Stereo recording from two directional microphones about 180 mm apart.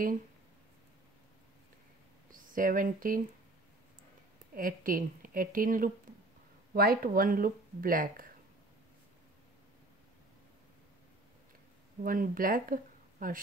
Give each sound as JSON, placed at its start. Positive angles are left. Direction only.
{"t": 2.3, "sound": "speech", "side_deg": -50}
{"t": 4.6, "sound": "speech", "side_deg": -50}
{"t": 12.0, "sound": "speech", "side_deg": -50}